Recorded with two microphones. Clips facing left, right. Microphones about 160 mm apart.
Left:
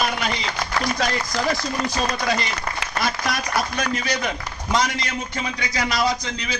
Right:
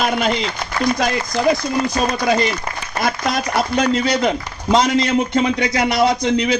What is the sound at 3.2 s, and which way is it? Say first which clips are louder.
Speech: right 5 dB; 25° right (ahead or behind).